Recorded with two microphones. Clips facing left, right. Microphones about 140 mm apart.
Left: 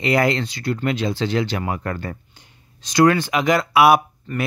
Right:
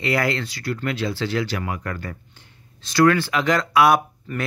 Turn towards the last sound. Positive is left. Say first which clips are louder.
# left 3 dB
turn(degrees=-5)  # may be behind; listen again after turning